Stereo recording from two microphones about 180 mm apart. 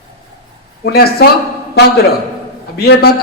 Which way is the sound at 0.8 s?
60° left (ahead or behind).